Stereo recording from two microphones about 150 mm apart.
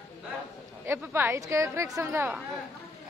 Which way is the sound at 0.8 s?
15° right (ahead or behind).